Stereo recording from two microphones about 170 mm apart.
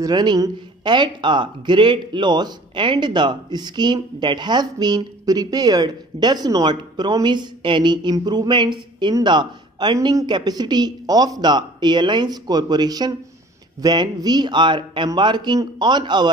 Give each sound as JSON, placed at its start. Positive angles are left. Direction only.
{"t": 0.0, "sound": "speech", "side_deg": -25}